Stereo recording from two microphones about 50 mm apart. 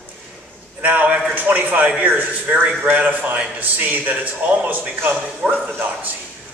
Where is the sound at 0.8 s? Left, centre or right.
Right.